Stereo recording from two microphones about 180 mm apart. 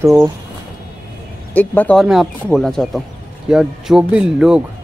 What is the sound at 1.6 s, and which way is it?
Speech, 10° left (ahead or behind).